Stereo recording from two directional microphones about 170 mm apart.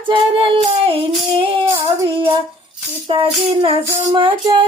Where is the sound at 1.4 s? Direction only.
30° right (ahead or behind).